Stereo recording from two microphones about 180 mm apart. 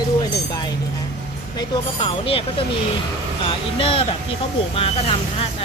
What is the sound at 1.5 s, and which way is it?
Speech, 30° left (ahead or behind).